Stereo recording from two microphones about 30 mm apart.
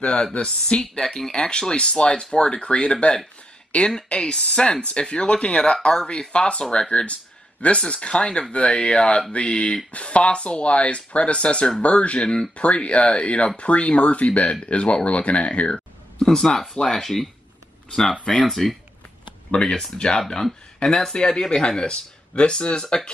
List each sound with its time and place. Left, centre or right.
0.0 s speech: left
0.9 s speech: left
3.7 s speech: left
4.2 s speech: left
15.7 s a sound: left
16.3 s speech: centre
18.4 s speech: centre
19.5 s speech: left